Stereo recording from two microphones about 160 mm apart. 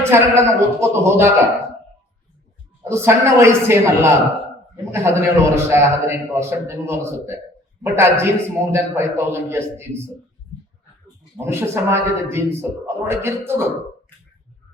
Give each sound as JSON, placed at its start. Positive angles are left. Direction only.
{"t": 0.0, "sound": "a man's voice", "side_deg": -15}
{"t": 2.9, "sound": "a man's voice", "side_deg": -15}
{"t": 11.3, "sound": "a man's voice", "side_deg": -15}